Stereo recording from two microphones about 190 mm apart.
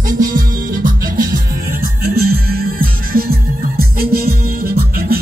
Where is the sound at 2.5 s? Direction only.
50° right (ahead or behind).